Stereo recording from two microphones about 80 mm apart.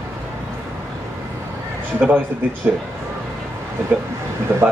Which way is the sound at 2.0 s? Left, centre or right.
Right.